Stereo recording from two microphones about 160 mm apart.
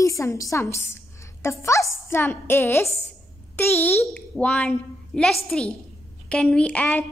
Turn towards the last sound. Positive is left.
turn(degrees=5)  # may be behind; listen again after turning